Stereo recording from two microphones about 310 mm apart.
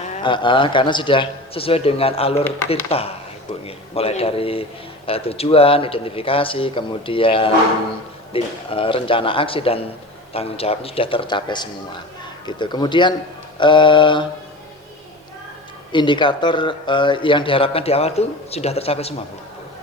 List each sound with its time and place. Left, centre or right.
0.2 s a man's voice: centre
15.9 s a man's voice: centre